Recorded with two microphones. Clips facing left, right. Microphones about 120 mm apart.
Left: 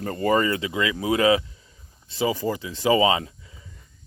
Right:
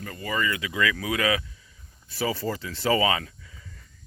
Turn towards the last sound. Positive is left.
turn(degrees=20)  # may be behind; listen again after turning